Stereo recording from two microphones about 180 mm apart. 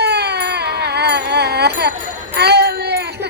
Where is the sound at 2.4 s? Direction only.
65° right (ahead or behind).